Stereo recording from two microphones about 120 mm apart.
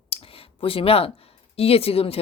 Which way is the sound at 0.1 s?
50° left (ahead or behind).